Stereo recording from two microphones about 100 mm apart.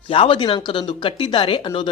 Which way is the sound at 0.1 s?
60° left (ahead or behind).